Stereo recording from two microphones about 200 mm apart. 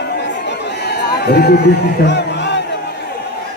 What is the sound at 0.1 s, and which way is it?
Chatter, 60° left (ahead or behind).